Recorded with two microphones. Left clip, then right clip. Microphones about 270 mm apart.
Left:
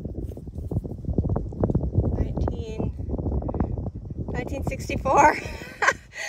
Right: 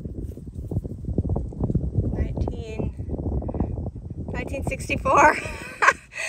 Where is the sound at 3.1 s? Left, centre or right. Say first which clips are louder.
Left 1 dB; right.